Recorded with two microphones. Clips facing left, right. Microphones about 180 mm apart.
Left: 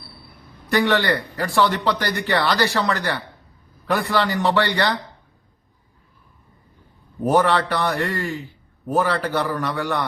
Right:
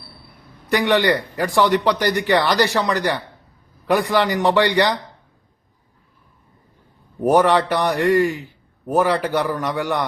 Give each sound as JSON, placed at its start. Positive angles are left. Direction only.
{"t": 0.7, "sound": "a man's voice", "side_deg": -15}
{"t": 7.2, "sound": "a man's voice", "side_deg": -15}